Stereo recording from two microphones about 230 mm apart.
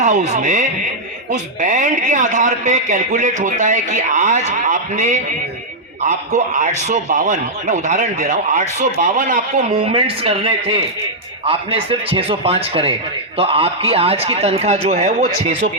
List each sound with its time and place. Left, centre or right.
0.0 s a man's voice: right